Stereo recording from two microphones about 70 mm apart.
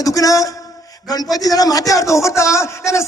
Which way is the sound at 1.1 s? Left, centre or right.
Left.